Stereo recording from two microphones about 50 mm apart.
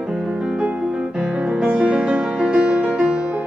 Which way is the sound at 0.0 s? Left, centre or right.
Centre.